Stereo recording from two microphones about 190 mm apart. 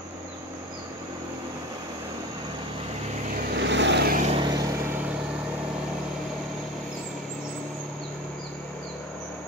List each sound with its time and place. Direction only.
3.5 s vehicle: 70° right (ahead or behind)
4.4 s vehicle: 20° right (ahead or behind)